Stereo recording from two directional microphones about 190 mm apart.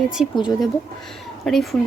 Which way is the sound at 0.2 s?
30° left (ahead or behind).